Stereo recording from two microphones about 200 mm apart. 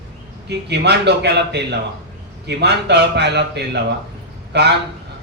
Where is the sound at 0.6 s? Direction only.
55° right (ahead or behind).